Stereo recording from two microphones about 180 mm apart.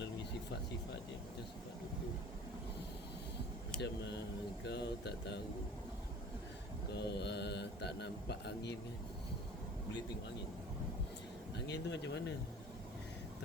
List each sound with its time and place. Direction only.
0.0 s a sound: 70° left (ahead or behind)
3.8 s speech: 70° left (ahead or behind)
6.9 s speech: 70° left (ahead or behind)
11.5 s speech: 75° left (ahead or behind)